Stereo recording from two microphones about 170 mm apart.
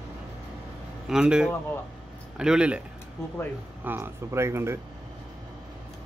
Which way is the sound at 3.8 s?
15° right (ahead or behind).